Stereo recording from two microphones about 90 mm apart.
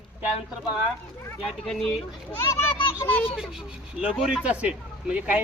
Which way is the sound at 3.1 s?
20° left (ahead or behind).